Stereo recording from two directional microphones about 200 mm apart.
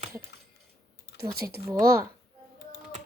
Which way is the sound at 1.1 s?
15° right (ahead or behind).